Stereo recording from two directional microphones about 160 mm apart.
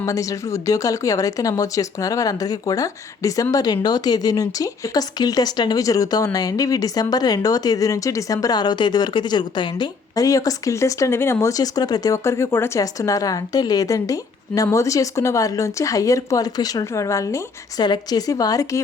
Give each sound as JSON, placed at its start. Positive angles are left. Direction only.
{"t": 0.0, "sound": "speech", "side_deg": 20}